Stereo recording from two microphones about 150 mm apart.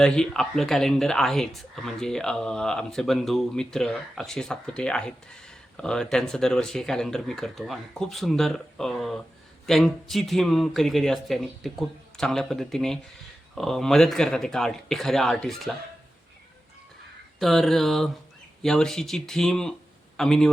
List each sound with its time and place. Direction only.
0.0 s speech: 5° left (ahead or behind)
17.4 s speech: centre (ahead or behind)